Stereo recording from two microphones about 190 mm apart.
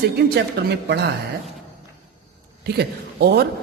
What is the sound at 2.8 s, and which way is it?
Speech, 55° right (ahead or behind).